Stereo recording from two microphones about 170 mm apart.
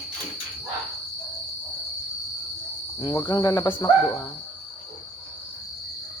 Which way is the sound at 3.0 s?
25° left (ahead or behind).